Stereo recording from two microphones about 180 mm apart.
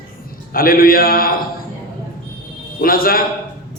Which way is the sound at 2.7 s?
55° left (ahead or behind).